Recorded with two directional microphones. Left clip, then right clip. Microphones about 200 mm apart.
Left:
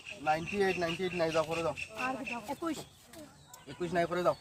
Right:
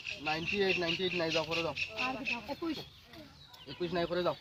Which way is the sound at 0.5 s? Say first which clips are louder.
Even; 35° left (ahead or behind).